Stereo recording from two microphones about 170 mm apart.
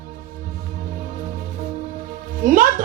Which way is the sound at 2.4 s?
55° right (ahead or behind).